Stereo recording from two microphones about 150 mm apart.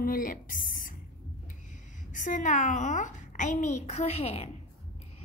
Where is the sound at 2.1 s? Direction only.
60° left (ahead or behind).